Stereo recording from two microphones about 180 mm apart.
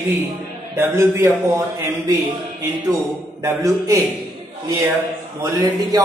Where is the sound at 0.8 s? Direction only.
15° right (ahead or behind).